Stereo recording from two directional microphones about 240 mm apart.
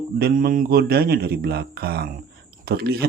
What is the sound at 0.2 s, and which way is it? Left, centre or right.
Speech, right.